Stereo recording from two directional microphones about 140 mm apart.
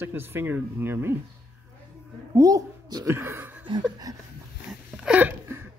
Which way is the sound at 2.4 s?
25° right (ahead or behind).